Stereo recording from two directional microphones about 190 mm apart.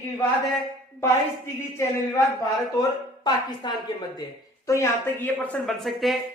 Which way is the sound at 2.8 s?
20° left (ahead or behind).